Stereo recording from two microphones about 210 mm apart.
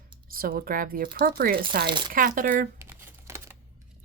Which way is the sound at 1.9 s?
20° right (ahead or behind).